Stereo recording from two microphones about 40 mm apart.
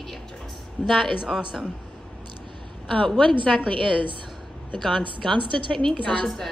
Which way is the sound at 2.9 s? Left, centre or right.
Centre.